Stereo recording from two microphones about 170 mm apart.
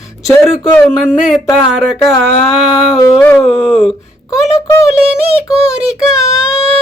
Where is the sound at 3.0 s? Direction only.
10° left (ahead or behind).